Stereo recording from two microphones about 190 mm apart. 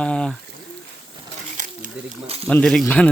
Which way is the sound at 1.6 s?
40° right (ahead or behind).